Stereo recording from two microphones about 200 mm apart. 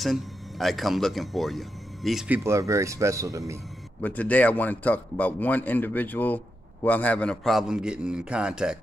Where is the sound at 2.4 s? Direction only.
15° right (ahead or behind).